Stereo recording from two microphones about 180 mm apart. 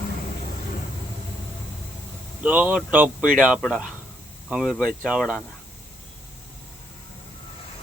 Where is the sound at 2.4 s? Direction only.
10° right (ahead or behind).